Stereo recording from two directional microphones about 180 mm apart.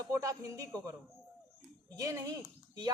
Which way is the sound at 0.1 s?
20° right (ahead or behind).